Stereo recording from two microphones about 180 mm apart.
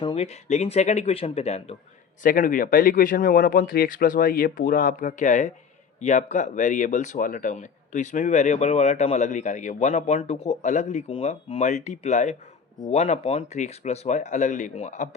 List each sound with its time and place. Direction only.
0.0 s speech: 30° left (ahead or behind)
2.2 s speech: 50° left (ahead or behind)